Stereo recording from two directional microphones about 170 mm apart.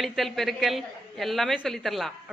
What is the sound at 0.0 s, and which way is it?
A woman's voice, centre (ahead or behind).